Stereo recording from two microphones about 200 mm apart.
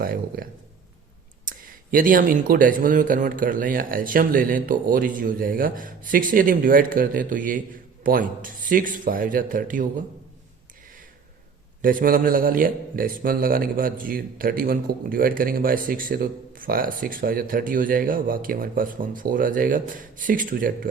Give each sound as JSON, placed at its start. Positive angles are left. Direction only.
{"t": 0.0, "sound": "a man's voice", "side_deg": -45}
{"t": 1.5, "sound": "a man's voice", "side_deg": -45}
{"t": 11.8, "sound": "a man's voice", "side_deg": -45}